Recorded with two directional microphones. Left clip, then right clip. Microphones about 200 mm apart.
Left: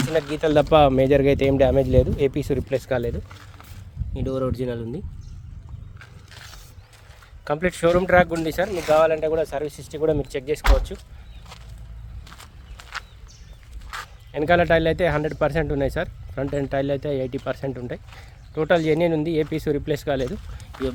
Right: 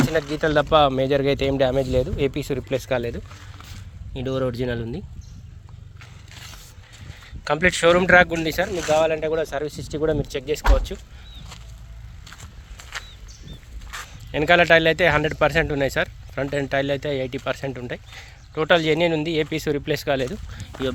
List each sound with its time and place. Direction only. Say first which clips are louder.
0.3 s speech: left 1 dB; 30° left (ahead or behind); by 3.2 s 10° left (ahead or behind)
4.1 s speech: right 1 dB; 5° right (ahead or behind)
7.4 s speech: right 3 dB; 10° left (ahead or behind)
8.9 s speech: left 2 dB; 10° right (ahead or behind); by 10.9 s 10° left (ahead or behind)
12.7 s walk: even; 5° left (ahead or behind)
13.9 s speech: right 2 dB; centre (ahead or behind)